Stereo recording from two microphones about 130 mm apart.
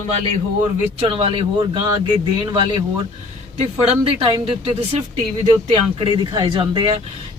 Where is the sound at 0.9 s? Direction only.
45° right (ahead or behind).